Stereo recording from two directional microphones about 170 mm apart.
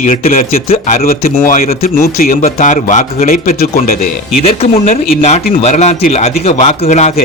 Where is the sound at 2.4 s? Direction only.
45° left (ahead or behind).